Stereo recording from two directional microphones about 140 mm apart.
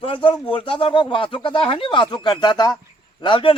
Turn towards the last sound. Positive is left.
turn(degrees=35)  # may be behind; listen again after turning